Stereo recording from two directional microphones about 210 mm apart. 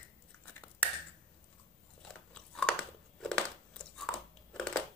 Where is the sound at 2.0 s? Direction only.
5° left (ahead or behind).